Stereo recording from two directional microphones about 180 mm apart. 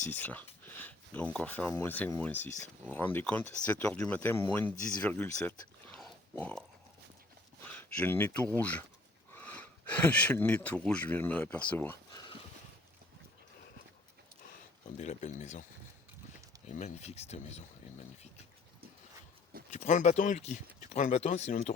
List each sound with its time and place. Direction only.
0.1 s speech: 10° left (ahead or behind)
12.2 s horse: 25° left (ahead or behind)
14.9 s speech: 40° left (ahead or behind)
16.6 s speech: 40° left (ahead or behind)
19.7 s speech: 40° left (ahead or behind)